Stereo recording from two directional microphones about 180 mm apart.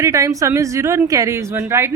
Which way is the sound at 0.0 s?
20° right (ahead or behind).